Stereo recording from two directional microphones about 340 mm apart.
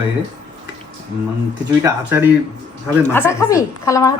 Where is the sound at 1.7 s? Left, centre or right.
Centre.